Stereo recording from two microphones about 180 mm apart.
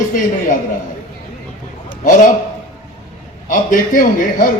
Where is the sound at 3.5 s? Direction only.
50° left (ahead or behind).